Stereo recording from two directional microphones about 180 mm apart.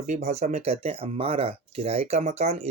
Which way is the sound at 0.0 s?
40° right (ahead or behind).